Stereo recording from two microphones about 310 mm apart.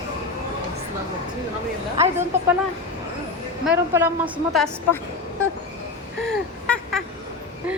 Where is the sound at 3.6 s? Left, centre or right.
Centre.